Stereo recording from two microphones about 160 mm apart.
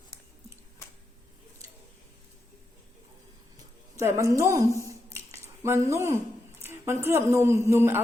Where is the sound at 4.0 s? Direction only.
20° right (ahead or behind).